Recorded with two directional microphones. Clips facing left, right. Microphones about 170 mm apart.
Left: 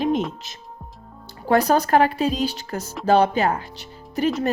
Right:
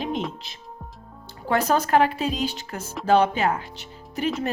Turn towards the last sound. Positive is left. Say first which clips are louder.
# left 4 dB
turn(degrees=35)  # may be behind; listen again after turning